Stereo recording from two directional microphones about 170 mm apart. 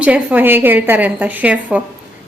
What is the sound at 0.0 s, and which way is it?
A woman's voice, 10° right (ahead or behind).